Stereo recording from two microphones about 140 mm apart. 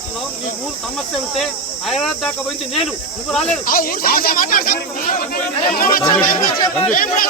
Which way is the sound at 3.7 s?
90° left.